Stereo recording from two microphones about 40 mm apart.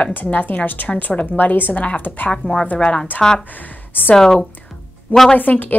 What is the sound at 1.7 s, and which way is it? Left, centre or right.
Speech, left.